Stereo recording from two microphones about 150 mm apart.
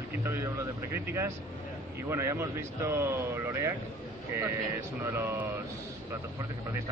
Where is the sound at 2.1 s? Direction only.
15° right (ahead or behind).